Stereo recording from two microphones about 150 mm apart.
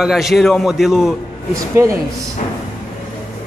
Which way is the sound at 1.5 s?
20° right (ahead or behind).